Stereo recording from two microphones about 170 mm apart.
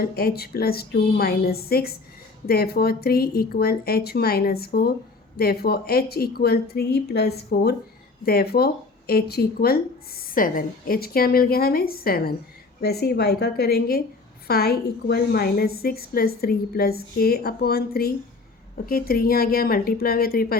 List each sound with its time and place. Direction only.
0.0 s a woman's voice: 65° left (ahead or behind)